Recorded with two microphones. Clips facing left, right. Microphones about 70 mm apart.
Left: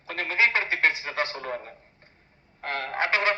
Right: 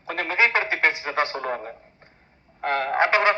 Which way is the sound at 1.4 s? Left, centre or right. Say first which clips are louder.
Right 5 dB; right.